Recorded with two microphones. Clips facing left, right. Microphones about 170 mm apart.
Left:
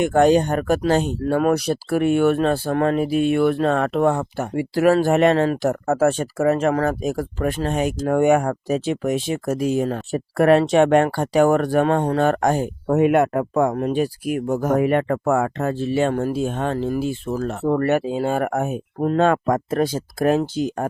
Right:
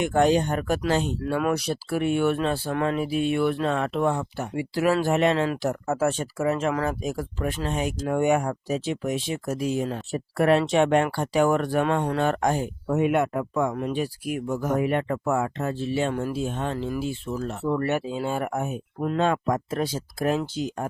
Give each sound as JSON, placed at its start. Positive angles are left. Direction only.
{"t": 0.0, "sound": "speech", "side_deg": 45}
{"t": 12.9, "sound": "speech", "side_deg": 75}
{"t": 13.5, "sound": "speech", "side_deg": 50}
{"t": 18.9, "sound": "speech", "side_deg": 45}